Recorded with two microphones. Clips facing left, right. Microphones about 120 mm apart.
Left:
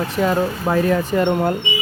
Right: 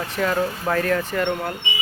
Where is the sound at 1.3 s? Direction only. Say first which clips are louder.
Left 8 dB; 30° left (ahead or behind).